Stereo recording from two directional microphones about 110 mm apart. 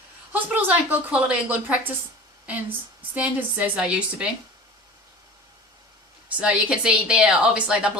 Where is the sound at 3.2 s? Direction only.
15° right (ahead or behind).